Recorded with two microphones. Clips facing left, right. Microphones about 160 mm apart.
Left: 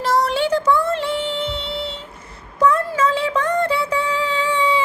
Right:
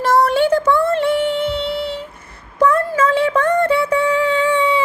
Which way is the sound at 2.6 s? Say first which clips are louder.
Right 2 dB; 55° right (ahead or behind).